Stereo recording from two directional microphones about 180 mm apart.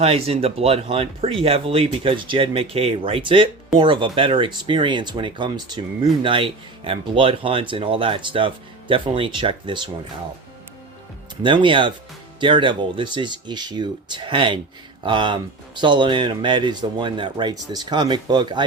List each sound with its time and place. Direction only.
0.0 s speech: 35° right (ahead or behind)
11.4 s speech: 30° right (ahead or behind)